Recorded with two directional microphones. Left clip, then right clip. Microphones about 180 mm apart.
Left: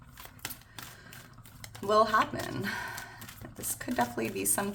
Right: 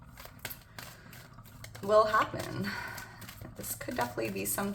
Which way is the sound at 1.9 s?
25° left (ahead or behind).